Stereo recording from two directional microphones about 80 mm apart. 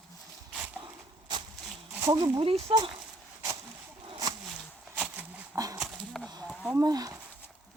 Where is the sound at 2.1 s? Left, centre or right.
Right.